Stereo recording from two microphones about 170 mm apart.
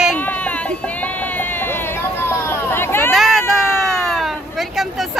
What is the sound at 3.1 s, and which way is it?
Vehicle, centre (ahead or behind).